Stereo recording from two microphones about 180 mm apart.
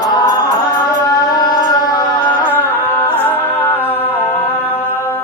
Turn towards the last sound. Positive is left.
turn(degrees=10)  # may be behind; listen again after turning